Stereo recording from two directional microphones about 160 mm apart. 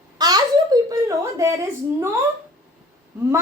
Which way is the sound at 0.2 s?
25° right (ahead or behind).